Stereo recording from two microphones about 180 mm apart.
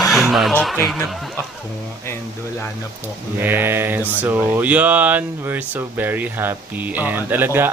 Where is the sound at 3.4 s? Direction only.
10° right (ahead or behind).